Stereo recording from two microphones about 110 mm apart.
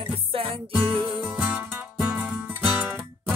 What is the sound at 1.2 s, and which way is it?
Music, 10° right (ahead or behind).